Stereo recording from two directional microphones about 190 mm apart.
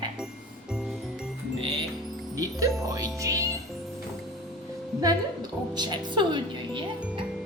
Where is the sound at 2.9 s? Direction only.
20° right (ahead or behind).